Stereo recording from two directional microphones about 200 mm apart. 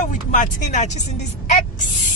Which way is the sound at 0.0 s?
40° left (ahead or behind).